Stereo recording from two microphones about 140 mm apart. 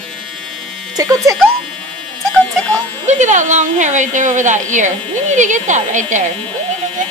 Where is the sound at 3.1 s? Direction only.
60° right (ahead or behind).